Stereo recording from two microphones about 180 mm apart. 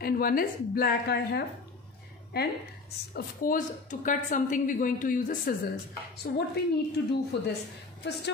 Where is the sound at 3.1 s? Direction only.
50° left (ahead or behind).